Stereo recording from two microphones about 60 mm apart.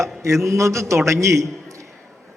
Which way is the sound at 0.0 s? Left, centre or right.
Right.